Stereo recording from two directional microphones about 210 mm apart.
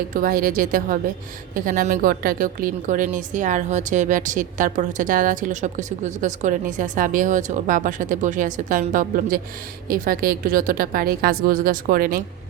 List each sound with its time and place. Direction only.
0.1 s a woman's voice: 40° right (ahead or behind)